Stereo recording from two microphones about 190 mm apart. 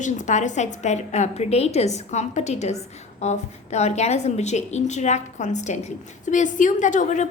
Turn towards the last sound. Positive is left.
turn(degrees=40)  # may be behind; listen again after turning